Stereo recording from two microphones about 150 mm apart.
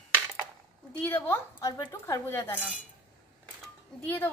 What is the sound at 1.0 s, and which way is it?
A woman's voice, 15° left (ahead or behind).